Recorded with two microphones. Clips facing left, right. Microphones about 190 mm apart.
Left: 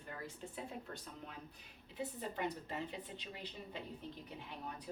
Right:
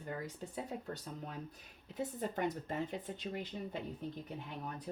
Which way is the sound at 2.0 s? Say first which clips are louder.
Right 4 dB; 45° right (ahead or behind).